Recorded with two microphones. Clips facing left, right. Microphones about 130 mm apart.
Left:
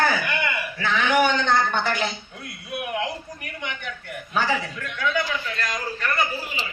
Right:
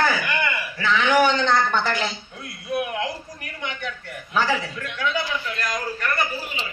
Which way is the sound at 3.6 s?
50° left (ahead or behind).